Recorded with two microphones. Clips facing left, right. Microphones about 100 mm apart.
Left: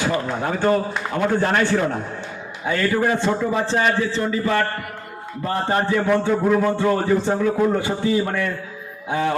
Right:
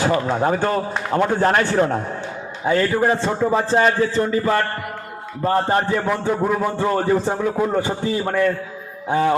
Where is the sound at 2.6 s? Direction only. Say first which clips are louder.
Right 2 dB; 30° right (ahead or behind).